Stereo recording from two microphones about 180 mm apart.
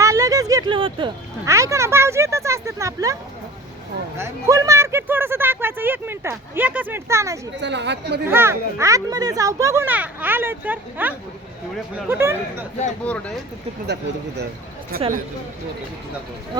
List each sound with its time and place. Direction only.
0.0 s a sound: 15° right (ahead or behind)
1.5 s speech: 15° right (ahead or behind)
4.2 s speech: 20° right (ahead or behind)
7.5 s a woman's voice: 75° right (ahead or behind)
8.3 s speech: 15° right (ahead or behind)
13.1 s speech: 5° left (ahead or behind)
13.8 s a woman's voice: 70° right (ahead or behind)
14.9 s speech: 55° right (ahead or behind)